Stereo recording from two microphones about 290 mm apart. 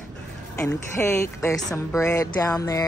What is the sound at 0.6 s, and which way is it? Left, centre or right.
Speech, centre.